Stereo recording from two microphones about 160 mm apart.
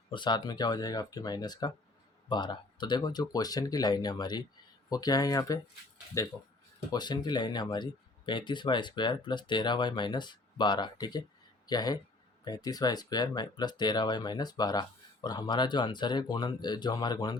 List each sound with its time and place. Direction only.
0.1 s speech: 30° left (ahead or behind)